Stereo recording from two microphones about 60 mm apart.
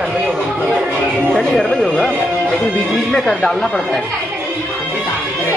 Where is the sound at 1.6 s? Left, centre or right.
Centre.